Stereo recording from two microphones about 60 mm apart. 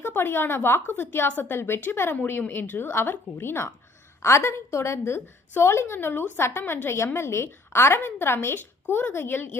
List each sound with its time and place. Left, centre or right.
0.0 s a woman's voice: left